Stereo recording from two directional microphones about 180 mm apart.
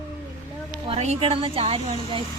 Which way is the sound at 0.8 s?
35° right (ahead or behind).